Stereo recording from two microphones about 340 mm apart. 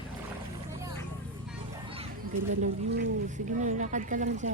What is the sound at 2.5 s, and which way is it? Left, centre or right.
Speech, right.